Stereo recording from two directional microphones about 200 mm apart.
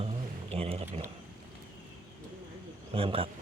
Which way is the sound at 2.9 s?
30° right (ahead or behind).